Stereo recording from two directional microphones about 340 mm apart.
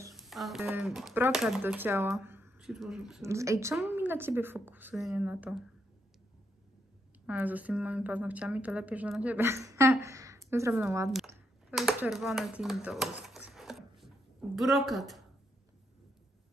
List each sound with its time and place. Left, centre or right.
0.0 s a woman's voice: centre
7.2 s a woman's voice: centre
13.5 s a sound: centre